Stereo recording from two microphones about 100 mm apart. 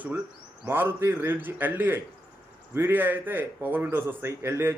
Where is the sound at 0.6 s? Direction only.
20° right (ahead or behind).